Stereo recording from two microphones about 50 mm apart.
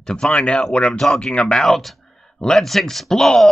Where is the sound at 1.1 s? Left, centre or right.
Centre.